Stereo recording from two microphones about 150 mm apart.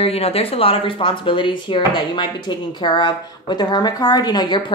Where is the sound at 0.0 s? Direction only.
40° left (ahead or behind).